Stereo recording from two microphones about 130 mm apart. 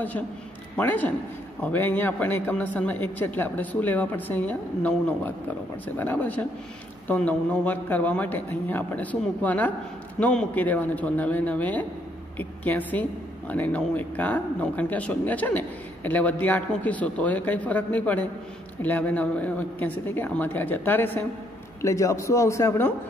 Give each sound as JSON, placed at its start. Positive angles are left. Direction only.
{"t": 0.7, "sound": "a man's voice", "side_deg": 15}